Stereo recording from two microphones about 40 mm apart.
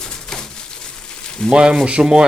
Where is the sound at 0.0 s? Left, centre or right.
Centre.